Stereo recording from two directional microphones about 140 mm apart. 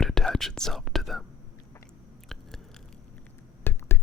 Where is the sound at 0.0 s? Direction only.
5° left (ahead or behind).